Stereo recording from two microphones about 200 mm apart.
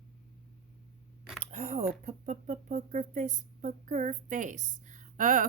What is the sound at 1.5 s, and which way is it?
Speech, 35° right (ahead or behind).